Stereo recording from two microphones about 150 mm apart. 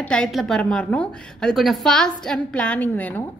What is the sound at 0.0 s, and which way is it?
A woman's voice, 5° left (ahead or behind).